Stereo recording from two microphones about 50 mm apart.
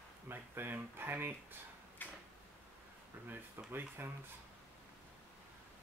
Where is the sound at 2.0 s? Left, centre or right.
Left.